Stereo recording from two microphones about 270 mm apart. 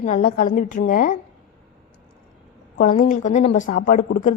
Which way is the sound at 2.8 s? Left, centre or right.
Left.